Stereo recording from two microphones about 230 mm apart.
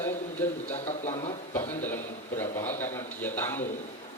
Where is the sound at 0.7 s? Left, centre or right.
Left.